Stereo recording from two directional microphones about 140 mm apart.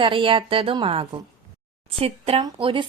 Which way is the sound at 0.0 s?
40° right (ahead or behind).